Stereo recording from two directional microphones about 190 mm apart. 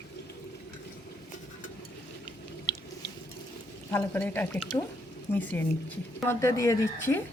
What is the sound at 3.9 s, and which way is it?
Speech, 10° left (ahead or behind).